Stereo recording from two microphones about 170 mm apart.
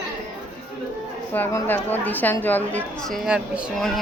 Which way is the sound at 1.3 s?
10° left (ahead or behind).